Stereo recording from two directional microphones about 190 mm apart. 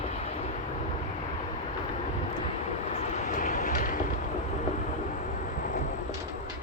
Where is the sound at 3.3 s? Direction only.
45° left (ahead or behind).